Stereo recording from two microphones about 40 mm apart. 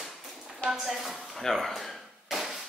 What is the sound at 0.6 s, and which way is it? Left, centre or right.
Speech, left.